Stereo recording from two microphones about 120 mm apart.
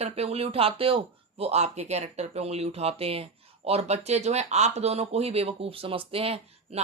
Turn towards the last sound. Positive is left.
turn(degrees=-55)  # may be behind; listen again after turning